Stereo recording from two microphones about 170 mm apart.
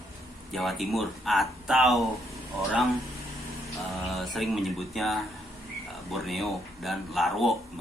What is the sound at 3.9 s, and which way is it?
Speech, centre (ahead or behind).